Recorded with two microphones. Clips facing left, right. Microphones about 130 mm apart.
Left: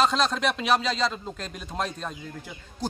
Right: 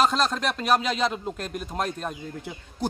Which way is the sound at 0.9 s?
15° right (ahead or behind).